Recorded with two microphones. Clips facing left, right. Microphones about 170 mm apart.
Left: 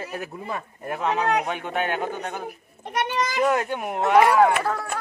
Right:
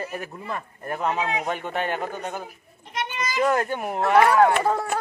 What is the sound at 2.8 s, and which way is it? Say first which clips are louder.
Children playing: left 5 dB; 60° left (ahead or behind).